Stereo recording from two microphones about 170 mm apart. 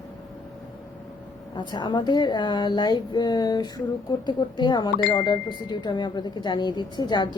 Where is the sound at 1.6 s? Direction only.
25° left (ahead or behind).